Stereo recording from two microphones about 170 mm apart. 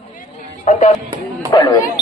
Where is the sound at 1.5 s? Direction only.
25° left (ahead or behind).